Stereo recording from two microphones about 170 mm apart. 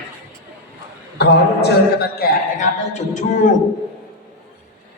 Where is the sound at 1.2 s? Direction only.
75° left (ahead or behind).